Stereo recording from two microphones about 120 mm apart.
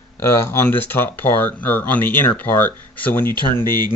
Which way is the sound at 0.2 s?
20° left (ahead or behind).